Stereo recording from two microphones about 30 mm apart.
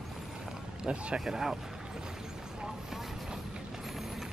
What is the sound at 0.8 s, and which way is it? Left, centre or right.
Speech, right.